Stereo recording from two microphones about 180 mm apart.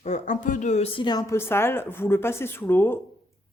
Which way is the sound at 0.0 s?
40° left (ahead or behind).